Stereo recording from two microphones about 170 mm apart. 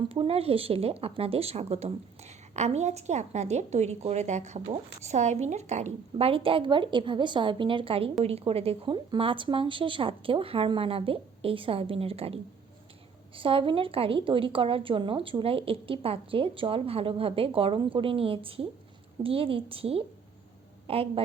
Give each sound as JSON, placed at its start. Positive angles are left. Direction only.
{"t": 0.1, "sound": "a woman's voice", "side_deg": -35}